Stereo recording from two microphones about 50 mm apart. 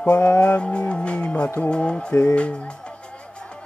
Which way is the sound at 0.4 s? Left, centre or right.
Left.